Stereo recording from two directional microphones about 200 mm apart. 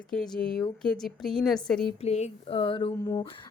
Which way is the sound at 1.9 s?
30° left (ahead or behind).